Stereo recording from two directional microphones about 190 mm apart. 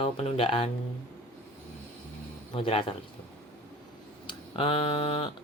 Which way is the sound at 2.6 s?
30° left (ahead or behind).